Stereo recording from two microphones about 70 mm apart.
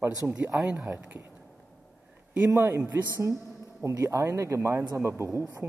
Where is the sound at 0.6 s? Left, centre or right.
Centre.